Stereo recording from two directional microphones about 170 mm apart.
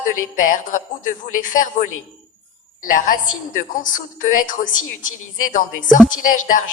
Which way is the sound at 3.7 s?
50° left (ahead or behind).